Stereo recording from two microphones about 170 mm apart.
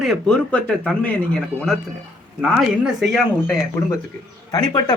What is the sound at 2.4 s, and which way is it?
Speech, 5° right (ahead or behind).